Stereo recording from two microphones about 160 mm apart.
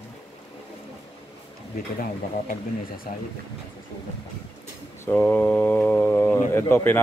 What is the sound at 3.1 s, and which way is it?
Speech, 55° left (ahead or behind).